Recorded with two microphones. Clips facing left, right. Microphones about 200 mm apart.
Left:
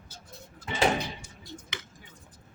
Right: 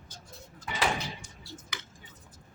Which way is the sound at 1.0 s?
15° left (ahead or behind).